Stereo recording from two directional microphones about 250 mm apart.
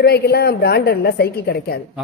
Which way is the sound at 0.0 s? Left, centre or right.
Left.